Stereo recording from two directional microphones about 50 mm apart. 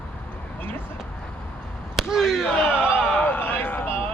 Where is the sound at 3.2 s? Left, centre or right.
Left.